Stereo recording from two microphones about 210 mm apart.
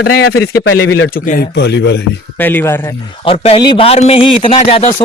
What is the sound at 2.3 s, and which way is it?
Speech, 10° left (ahead or behind).